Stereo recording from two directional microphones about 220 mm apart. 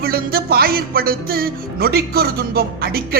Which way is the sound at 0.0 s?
45° right (ahead or behind).